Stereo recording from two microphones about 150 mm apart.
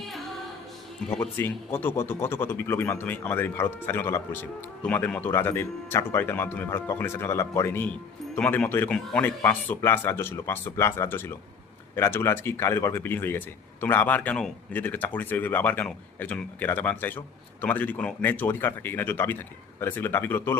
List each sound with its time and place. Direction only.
1.2 s speech: 15° left (ahead or behind)